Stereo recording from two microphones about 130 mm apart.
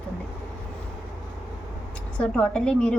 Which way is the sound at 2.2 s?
5° left (ahead or behind).